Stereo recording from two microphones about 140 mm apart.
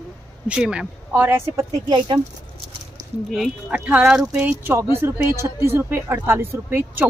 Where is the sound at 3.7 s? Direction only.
10° right (ahead or behind).